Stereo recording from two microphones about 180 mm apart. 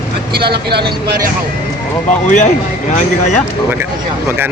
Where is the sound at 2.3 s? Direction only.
40° left (ahead or behind).